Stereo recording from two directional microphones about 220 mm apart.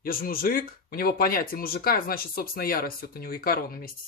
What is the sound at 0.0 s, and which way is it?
Speech, 40° left (ahead or behind).